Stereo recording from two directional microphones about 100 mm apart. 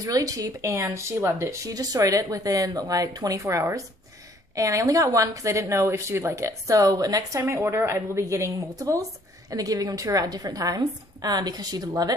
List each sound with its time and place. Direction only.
0.0 s speech: 35° right (ahead or behind)